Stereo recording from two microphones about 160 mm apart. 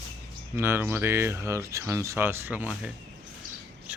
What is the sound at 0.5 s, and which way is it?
Speech, 15° right (ahead or behind).